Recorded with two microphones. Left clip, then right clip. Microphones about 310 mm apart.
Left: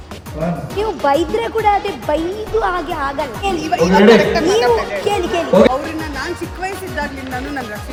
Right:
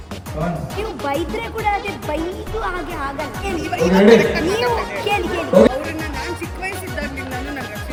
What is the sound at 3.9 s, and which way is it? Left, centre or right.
Speech, left.